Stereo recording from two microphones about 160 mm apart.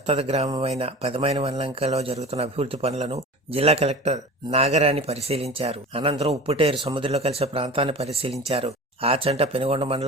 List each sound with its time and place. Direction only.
0.0 s speech: 40° right (ahead or behind)